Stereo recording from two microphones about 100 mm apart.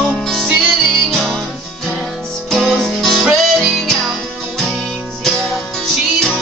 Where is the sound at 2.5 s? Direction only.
5° left (ahead or behind).